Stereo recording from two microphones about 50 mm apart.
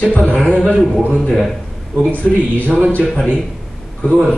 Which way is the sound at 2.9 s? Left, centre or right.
Left.